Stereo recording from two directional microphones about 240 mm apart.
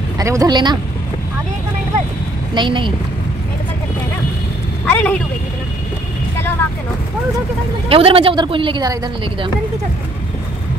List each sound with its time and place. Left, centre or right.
0.2 s speech: centre
2.5 s a woman's voice: centre
4.8 s a sound: centre
7.9 s a woman's voice: right